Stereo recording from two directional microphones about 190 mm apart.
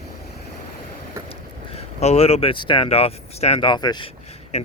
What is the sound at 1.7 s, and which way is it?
Speech, 35° left (ahead or behind).